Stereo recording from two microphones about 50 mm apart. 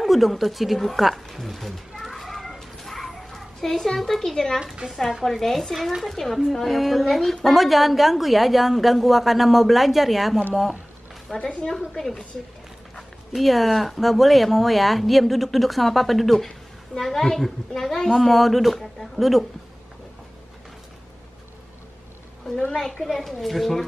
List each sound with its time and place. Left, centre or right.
0.0 s speech: centre
1.3 s children playing: centre
4.8 s speech: centre
5.4 s a woman's voice: centre
12.9 s speech: centre
23.0 s speech: centre